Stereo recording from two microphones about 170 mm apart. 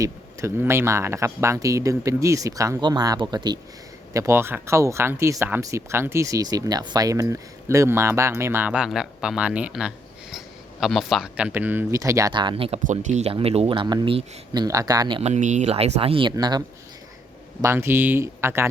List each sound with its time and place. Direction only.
0.0 s speech: 15° right (ahead or behind)
15.2 s speech: 45° right (ahead or behind); by 18.7 s 15° right (ahead or behind)